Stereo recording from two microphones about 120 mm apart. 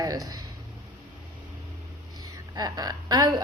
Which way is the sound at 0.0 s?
30° right (ahead or behind).